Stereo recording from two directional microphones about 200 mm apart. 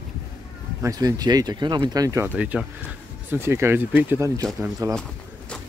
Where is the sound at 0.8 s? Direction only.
20° right (ahead or behind).